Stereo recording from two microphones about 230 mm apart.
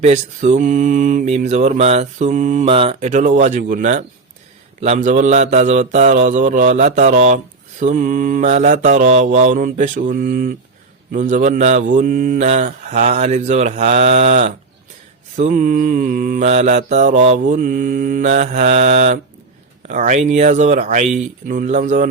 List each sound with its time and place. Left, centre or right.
0.0 s mantra: right